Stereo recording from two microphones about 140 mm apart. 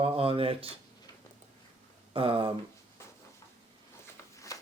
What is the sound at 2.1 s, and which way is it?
Speech, 40° right (ahead or behind).